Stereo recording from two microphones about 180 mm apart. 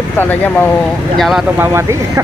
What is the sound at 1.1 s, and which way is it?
Speech, centre (ahead or behind).